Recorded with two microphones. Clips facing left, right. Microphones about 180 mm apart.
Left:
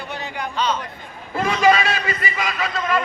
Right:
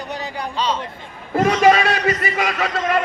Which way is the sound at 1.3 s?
45° right (ahead or behind).